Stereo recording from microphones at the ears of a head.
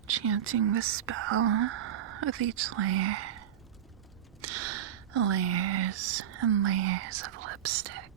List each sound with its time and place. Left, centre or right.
0.1 s speech: right